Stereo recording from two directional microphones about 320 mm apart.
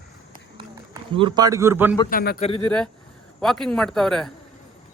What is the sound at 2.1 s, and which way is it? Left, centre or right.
Speech, left.